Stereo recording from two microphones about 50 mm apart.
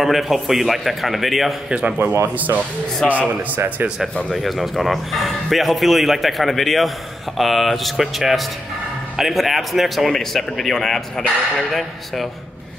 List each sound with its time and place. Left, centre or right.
0.0 s speech: centre
1.7 s a man's voice: right
2.3 s a man's voice: right
4.0 s speech: centre